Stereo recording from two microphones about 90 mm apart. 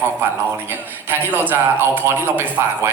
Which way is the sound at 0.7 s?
25° right (ahead or behind).